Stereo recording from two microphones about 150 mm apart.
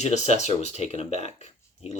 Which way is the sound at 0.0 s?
50° left (ahead or behind).